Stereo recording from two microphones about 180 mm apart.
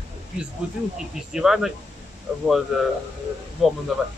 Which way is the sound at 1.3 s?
Centre (ahead or behind).